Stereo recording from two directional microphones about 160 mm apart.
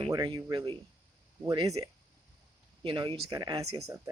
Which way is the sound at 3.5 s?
35° right (ahead or behind).